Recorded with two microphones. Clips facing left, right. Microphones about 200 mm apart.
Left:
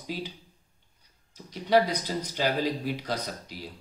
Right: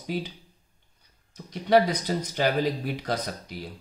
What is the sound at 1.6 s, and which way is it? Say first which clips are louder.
Speech: right 2 dB; 55° right (ahead or behind).